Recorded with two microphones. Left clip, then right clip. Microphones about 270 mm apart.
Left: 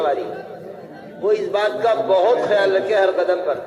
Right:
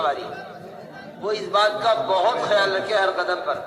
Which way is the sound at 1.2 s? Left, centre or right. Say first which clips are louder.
Left 2 dB; right.